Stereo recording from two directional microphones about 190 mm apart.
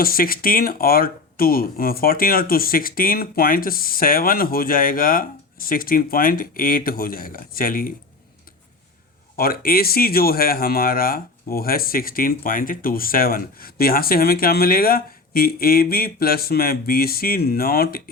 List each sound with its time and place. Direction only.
0.0 s a man's voice: 50° left (ahead or behind)
9.3 s a man's voice: 50° left (ahead or behind)